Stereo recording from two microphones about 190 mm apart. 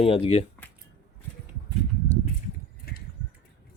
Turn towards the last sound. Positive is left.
turn(degrees=55)  # may be behind; listen again after turning